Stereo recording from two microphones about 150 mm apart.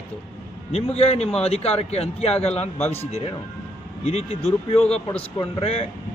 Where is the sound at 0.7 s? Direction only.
40° left (ahead or behind).